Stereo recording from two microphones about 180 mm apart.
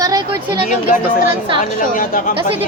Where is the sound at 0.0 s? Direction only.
20° right (ahead or behind).